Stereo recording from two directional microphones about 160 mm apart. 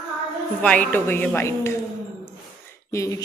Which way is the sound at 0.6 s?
10° left (ahead or behind).